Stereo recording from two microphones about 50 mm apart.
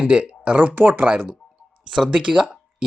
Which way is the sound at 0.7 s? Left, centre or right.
Right.